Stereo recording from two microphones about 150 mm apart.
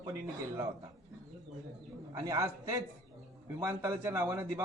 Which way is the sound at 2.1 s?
20° right (ahead or behind).